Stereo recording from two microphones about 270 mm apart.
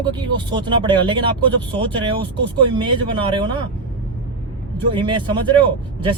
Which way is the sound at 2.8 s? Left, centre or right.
Centre.